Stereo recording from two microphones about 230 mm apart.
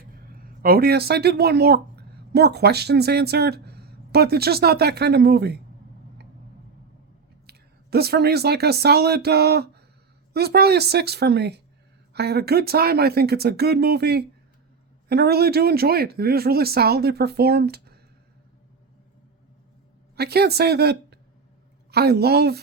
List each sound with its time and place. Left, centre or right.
0.3 s speech: right
7.4 s speech: right
20.1 s speech: right